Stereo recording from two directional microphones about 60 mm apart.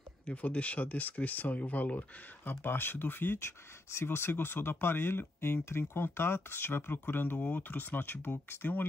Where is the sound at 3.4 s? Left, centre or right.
Left.